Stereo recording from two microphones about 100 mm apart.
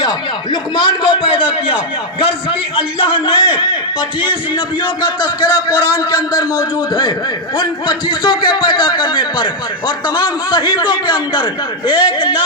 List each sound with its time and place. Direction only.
0.5 s a man's voice: 45° left (ahead or behind)
5.0 s a man's voice: 45° left (ahead or behind)